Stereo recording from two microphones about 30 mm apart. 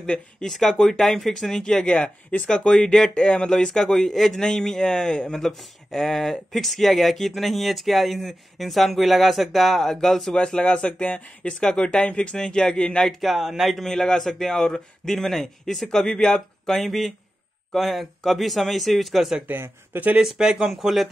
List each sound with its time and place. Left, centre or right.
0.4 s speech: centre
1.3 s speech: centre
1.8 s speech: left
3.9 s speech: centre
4.4 s speech: left
10.3 s speech: left
10.9 s speech: left
11.7 s speech: left
13.2 s speech: centre
13.8 s speech: centre
20.2 s speech: centre
20.8 s speech: centre